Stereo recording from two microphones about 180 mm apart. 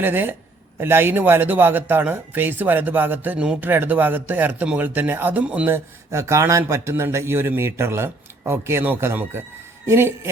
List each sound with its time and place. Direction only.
0.0 s speech: 10° right (ahead or behind)